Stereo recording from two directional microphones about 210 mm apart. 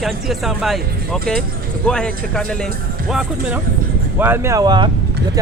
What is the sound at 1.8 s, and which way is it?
Speech, 5° left (ahead or behind).